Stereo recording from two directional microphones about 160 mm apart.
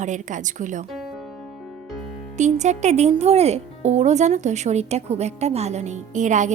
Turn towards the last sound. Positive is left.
turn(degrees=-50)  # may be behind; listen again after turning